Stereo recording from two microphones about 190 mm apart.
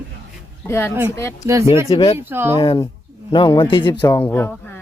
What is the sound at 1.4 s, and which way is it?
Speech, 15° right (ahead or behind).